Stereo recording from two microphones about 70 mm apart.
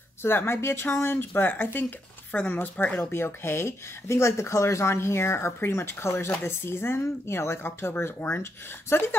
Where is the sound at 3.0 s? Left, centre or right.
Left.